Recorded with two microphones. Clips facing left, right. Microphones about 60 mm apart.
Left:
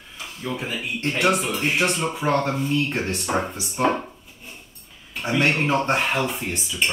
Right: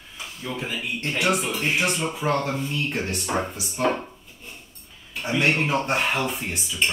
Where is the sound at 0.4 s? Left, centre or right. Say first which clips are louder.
Left 2 dB; centre.